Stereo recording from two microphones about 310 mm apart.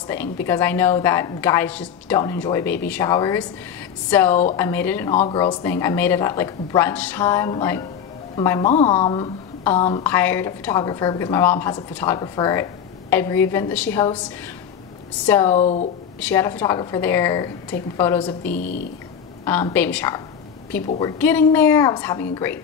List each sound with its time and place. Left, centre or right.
0.1 s a woman's voice: centre
5.1 s a woman's voice: centre
15.2 s a woman's voice: centre
15.5 s speech: left
16.2 s a woman's voice: centre
18.4 s speech: left
19.4 s a woman's voice: centre